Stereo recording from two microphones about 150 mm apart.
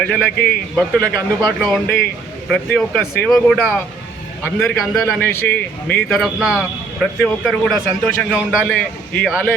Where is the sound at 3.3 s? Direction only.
5° left (ahead or behind).